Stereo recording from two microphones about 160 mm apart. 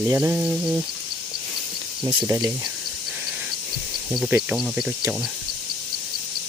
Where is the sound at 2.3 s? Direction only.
20° right (ahead or behind).